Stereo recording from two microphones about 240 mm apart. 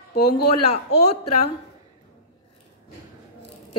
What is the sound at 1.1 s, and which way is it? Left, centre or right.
Speech, left.